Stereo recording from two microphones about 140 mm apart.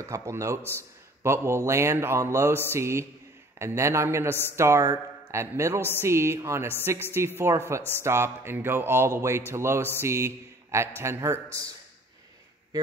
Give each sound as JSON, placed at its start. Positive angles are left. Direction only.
{"t": 0.0, "sound": "a man's voice", "side_deg": -20}
{"t": 0.6, "sound": "a man's voice", "side_deg": 15}
{"t": 1.2, "sound": "a man's voice", "side_deg": -20}
{"t": 6.8, "sound": "a sound", "side_deg": -15}
{"t": 9.9, "sound": "a man's voice", "side_deg": -20}